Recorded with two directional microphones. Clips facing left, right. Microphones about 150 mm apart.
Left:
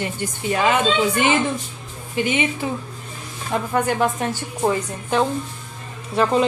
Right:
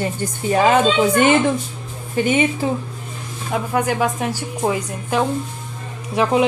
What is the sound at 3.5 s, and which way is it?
Speech, 5° right (ahead or behind).